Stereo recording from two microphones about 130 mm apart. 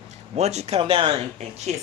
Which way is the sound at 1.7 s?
60° right (ahead or behind).